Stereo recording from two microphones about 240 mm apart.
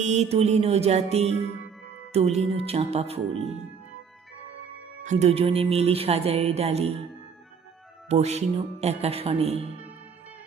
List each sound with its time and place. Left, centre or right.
0.0 s music: right
1.4 s music: left
2.1 s music: right
5.0 s music: right
8.1 s music: right